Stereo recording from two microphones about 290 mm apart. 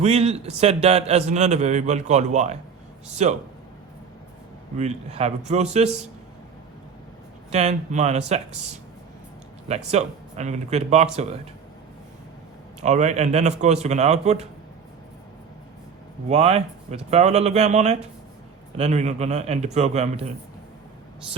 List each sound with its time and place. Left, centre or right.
0.0 s a man's voice: right
4.8 s a man's voice: right
7.5 s a man's voice: right
12.8 s a man's voice: right
16.3 s a man's voice: right